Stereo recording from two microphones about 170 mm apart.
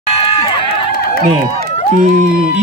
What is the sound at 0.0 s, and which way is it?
Run, 30° left (ahead or behind).